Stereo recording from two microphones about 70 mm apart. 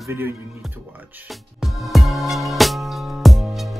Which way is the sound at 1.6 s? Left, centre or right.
Centre.